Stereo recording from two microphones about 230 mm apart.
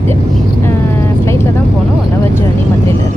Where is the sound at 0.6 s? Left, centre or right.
Centre.